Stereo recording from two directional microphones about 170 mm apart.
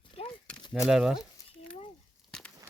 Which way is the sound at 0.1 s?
35° left (ahead or behind).